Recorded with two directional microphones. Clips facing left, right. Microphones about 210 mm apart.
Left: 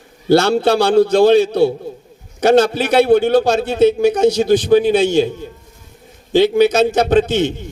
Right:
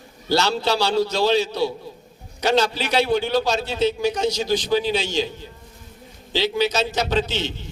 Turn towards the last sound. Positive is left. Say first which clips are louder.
# left 10 dB
turn(degrees=50)  # may be behind; listen again after turning